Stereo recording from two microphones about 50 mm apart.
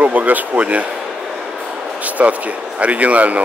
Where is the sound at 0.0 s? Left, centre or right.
Right.